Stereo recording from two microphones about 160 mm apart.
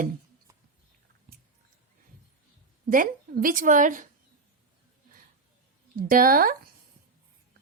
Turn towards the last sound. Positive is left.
turn(degrees=-65)  # may be behind; listen again after turning